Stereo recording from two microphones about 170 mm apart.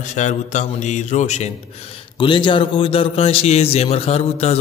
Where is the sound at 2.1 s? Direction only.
30° left (ahead or behind).